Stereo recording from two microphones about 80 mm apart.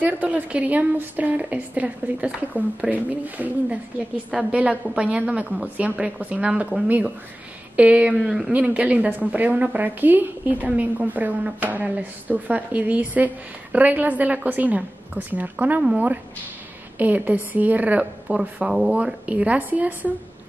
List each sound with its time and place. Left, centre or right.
0.0 s a woman's voice: centre
7.7 s a woman's voice: centre
17.0 s a woman's voice: right